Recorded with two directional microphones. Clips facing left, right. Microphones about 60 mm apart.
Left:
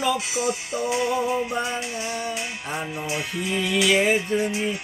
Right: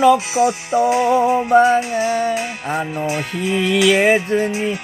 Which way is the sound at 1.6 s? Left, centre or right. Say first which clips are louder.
Right 13 dB; right.